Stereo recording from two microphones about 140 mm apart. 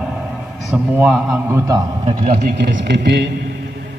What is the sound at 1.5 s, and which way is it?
Speech, 25° right (ahead or behind).